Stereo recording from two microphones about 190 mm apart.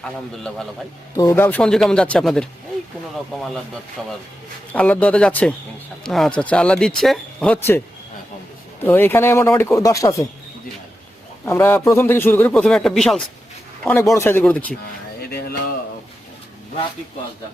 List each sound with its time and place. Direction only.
0.0 s speech: 5° left (ahead or behind)
1.1 s speech: 15° left (ahead or behind)
4.7 s speech: 5° left (ahead or behind)
8.8 s speech: 10° left (ahead or behind)
11.4 s speech: 15° left (ahead or behind)
13.8 s speech: 15° left (ahead or behind)